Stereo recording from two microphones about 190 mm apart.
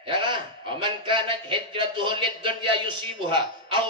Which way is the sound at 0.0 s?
25° right (ahead or behind).